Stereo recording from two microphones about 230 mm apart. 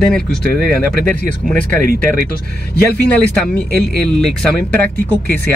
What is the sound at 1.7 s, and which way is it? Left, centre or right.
Speech, right.